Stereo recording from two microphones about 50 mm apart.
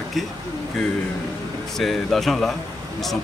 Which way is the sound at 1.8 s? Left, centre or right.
Centre.